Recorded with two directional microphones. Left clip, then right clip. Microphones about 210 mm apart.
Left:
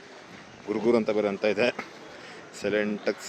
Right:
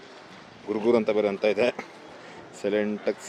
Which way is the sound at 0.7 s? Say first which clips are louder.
Right 1 dB; 5° right (ahead or behind).